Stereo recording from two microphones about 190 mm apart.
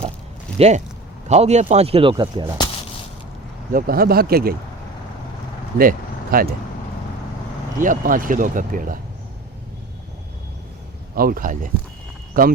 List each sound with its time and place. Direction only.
1.3 s speech: 35° right (ahead or behind)
3.7 s speech: 50° right (ahead or behind)
5.7 s speech: 50° right (ahead or behind)
7.8 s speech: 45° right (ahead or behind)
11.1 s speech: 50° right (ahead or behind)